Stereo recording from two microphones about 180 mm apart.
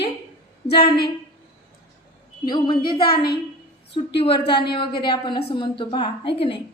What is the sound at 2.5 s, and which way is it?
Speech, 25° left (ahead or behind).